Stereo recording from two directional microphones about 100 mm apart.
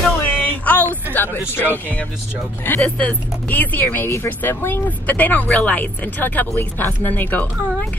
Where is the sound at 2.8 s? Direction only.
15° left (ahead or behind).